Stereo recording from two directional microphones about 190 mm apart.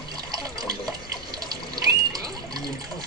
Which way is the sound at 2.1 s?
20° right (ahead or behind).